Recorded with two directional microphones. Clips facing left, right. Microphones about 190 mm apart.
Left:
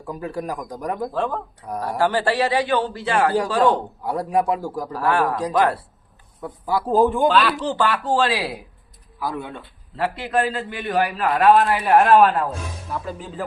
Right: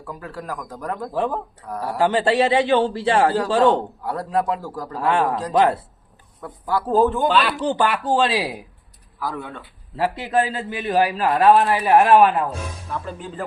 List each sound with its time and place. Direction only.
0.0 s a man's voice: 15° left (ahead or behind)
1.1 s a man's voice: 15° right (ahead or behind)
1.6 s a man's voice: 15° left (ahead or behind)
2.0 s a man's voice: 20° right (ahead or behind)
3.6 s a man's voice: 10° left (ahead or behind)
4.9 s a man's voice: 25° right (ahead or behind)
6.4 s a man's voice: 10° left (ahead or behind)
7.6 s a man's voice: 15° right (ahead or behind)
9.1 s speech: 15° left (ahead or behind)
10.0 s a man's voice: 15° right (ahead or behind)
12.9 s speech: centre (ahead or behind)